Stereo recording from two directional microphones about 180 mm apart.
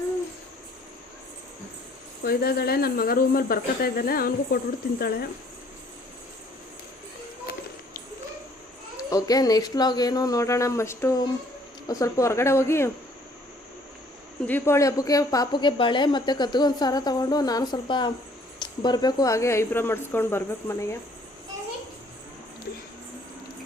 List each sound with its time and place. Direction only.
2.2 s speech: 60° left (ahead or behind)
7.5 s a sound: 55° left (ahead or behind)
9.0 s a woman's voice: 20° left (ahead or behind)
14.4 s a woman's voice: 10° left (ahead or behind)